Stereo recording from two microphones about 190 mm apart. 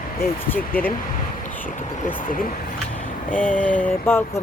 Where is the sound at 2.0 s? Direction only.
45° left (ahead or behind).